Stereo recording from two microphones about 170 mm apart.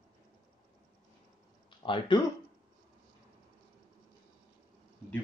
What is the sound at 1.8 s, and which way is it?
Speech, 30° left (ahead or behind).